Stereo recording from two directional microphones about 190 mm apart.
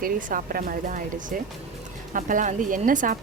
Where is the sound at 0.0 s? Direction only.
45° right (ahead or behind).